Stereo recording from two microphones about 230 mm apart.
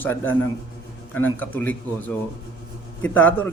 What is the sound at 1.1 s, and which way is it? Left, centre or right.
Speech, centre.